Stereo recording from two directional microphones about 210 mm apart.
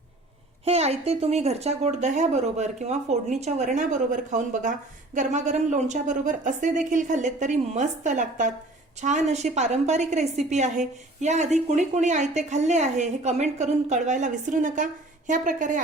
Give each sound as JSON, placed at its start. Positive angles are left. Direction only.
{"t": 0.6, "sound": "a woman's voice", "side_deg": -30}